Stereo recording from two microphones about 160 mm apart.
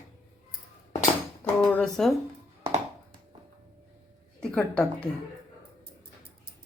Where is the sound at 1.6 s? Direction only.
5° left (ahead or behind).